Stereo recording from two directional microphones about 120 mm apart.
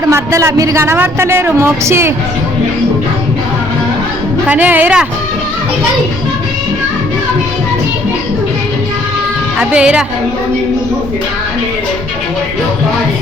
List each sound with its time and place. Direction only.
0.1 s a woman's voice: 25° right (ahead or behind)
4.4 s speech: 15° right (ahead or behind)
9.6 s speech: 10° right (ahead or behind)